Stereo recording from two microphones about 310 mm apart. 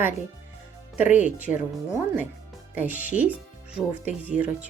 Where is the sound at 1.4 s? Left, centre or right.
Centre.